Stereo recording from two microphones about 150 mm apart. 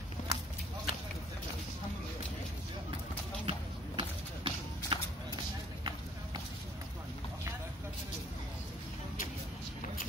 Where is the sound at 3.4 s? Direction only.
30° right (ahead or behind).